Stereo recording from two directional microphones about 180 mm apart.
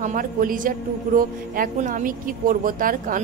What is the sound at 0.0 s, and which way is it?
A man's voice, 50° right (ahead or behind).